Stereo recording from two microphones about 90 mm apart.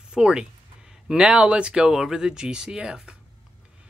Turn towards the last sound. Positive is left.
turn(degrees=-10)  # may be behind; listen again after turning